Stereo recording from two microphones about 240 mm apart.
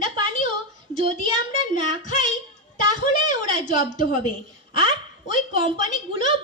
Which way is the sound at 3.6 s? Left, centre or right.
Left.